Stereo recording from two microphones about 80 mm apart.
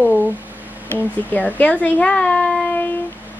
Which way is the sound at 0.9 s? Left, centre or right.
Left.